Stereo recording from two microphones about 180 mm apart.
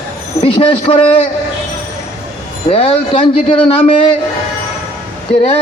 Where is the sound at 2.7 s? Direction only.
30° left (ahead or behind).